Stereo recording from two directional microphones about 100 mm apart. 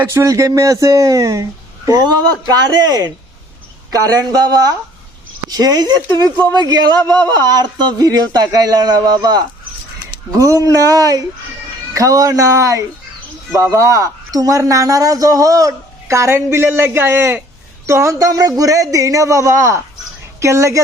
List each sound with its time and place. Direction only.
0.0 s a man's voice: 25° right (ahead or behind); by 9.4 s 45° right (ahead or behind)
10.3 s a man's voice: 30° right (ahead or behind)